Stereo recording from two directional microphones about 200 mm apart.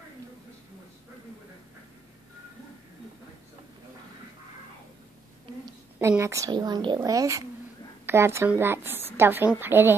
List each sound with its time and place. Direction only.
5.9 s a woman's voice: 15° right (ahead or behind)